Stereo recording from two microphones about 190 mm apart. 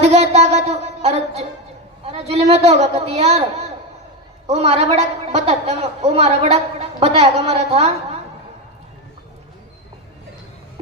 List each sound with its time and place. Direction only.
0.0 s a sound: 35° right (ahead or behind)
2.0 s a woman's voice: 30° right (ahead or behind)
4.4 s a woman's voice: 35° right (ahead or behind)